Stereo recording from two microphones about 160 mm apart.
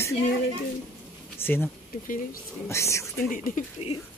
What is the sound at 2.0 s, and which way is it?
Speech, 55° left (ahead or behind).